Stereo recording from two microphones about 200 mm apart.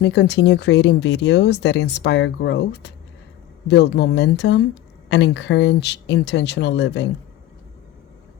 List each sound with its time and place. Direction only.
0.0 s speech: 60° left (ahead or behind)